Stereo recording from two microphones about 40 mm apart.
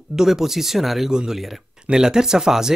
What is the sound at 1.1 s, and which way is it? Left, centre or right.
Speech, centre.